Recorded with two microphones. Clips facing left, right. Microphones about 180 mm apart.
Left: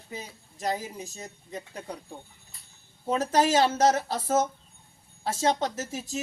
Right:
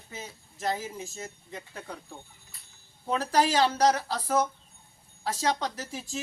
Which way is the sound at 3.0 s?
20° left (ahead or behind).